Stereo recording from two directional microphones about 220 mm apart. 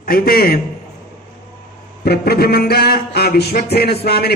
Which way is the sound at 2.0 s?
45° left (ahead or behind).